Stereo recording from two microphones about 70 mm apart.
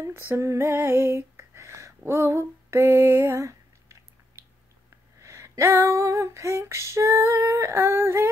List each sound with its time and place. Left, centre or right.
0.0 s female singing: right
5.2 s female singing: right